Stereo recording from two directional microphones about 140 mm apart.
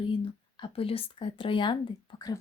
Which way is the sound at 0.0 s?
35° left (ahead or behind).